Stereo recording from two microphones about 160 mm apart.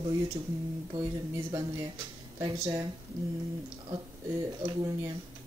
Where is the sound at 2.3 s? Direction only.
20° right (ahead or behind).